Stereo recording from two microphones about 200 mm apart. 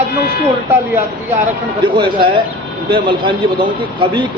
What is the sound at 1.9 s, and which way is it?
A man's voice, 25° right (ahead or behind).